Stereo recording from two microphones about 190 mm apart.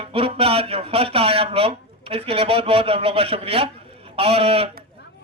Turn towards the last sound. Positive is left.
turn(degrees=-30)  # may be behind; listen again after turning